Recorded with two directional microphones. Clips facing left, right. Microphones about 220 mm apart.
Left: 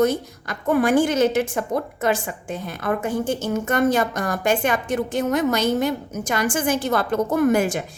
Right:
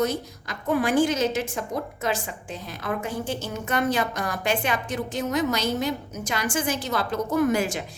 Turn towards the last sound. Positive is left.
turn(degrees=50)  # may be behind; listen again after turning